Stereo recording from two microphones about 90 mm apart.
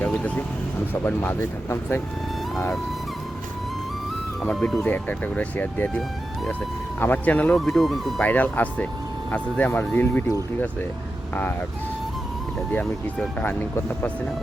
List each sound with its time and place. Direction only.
0.1 s speech: 15° left (ahead or behind)
4.5 s speech: centre (ahead or behind)
4.8 s speech: 20° left (ahead or behind)
7.0 s speech: 20° left (ahead or behind)
7.5 s speech: centre (ahead or behind)
8.2 s speech: 20° left (ahead or behind)
13.4 s speech: 20° left (ahead or behind)